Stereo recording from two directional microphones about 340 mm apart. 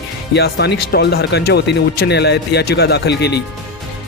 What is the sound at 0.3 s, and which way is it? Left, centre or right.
Speech, left.